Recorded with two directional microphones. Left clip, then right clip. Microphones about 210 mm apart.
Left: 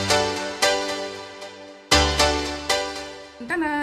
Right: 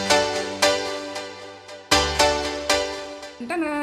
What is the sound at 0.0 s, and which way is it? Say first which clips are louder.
Music: right 1 dB; centre (ahead or behind).